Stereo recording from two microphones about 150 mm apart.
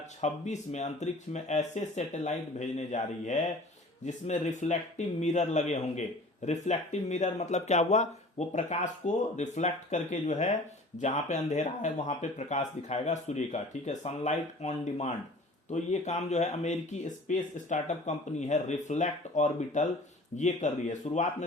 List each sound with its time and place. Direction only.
0.2 s speech: 50° left (ahead or behind)